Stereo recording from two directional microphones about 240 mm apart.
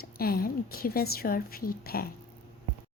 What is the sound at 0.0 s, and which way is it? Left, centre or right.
Speech, left.